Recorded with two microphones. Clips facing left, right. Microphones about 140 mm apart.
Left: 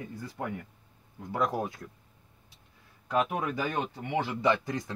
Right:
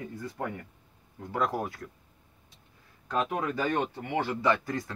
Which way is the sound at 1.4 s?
20° left (ahead or behind).